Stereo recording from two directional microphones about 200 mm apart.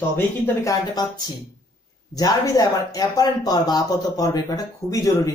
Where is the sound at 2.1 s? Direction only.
20° left (ahead or behind).